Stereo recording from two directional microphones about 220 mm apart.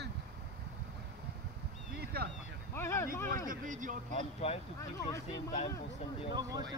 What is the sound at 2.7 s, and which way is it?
Speech, 10° left (ahead or behind).